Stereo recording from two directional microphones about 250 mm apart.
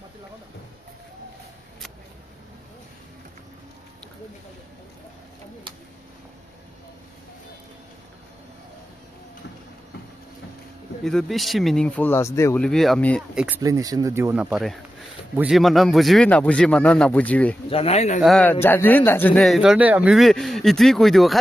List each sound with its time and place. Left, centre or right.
11.1 s speech: centre
13.6 s speech: centre
17.6 s speech: left
18.2 s speech: centre